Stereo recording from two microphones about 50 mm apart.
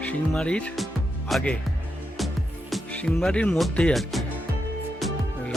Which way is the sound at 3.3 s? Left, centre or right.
Centre.